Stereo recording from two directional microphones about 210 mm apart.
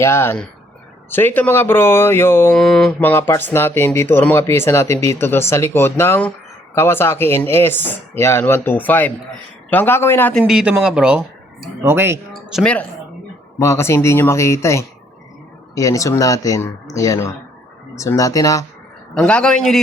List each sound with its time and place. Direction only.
0.0 s speech: 10° left (ahead or behind)
10.4 s speech: 5° right (ahead or behind)
12.3 s speech: centre (ahead or behind)
13.6 s speech: 10° left (ahead or behind)
19.1 s speech: 5° left (ahead or behind)